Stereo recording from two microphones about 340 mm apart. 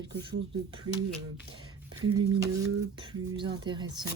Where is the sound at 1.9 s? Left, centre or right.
Right.